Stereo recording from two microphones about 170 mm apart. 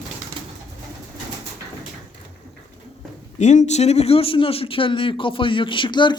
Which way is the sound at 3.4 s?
45° left (ahead or behind).